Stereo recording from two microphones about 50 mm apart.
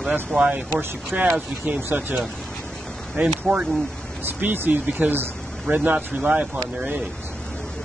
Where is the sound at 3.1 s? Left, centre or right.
Centre.